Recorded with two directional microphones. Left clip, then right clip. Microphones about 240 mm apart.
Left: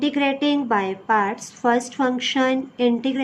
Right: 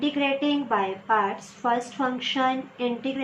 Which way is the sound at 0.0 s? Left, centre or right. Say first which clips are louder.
Left 4 dB; left.